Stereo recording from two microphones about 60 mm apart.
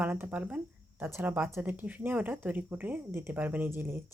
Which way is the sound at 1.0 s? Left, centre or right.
Right.